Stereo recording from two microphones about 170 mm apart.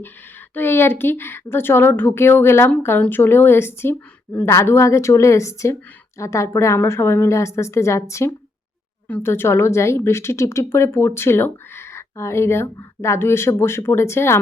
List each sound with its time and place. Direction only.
0.5 s speech: 15° left (ahead or behind)